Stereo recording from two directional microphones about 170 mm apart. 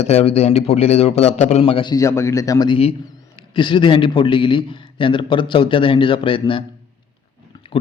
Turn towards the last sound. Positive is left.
turn(degrees=30)  # may be behind; listen again after turning